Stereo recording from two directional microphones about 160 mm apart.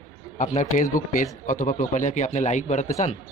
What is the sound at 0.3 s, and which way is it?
Speech, 50° left (ahead or behind).